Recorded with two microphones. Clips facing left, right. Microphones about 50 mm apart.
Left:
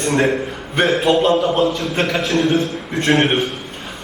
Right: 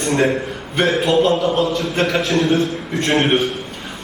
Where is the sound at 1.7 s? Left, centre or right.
Centre.